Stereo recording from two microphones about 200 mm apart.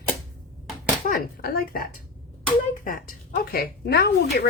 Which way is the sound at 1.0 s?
50° left (ahead or behind).